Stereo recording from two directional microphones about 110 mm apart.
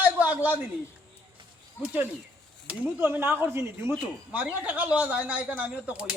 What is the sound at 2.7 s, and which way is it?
Speech, 20° right (ahead or behind).